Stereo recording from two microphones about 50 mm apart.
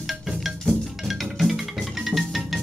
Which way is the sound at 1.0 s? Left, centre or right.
Centre.